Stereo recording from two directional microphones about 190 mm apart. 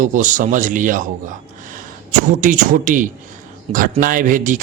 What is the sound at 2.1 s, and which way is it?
A man's voice, 45° right (ahead or behind).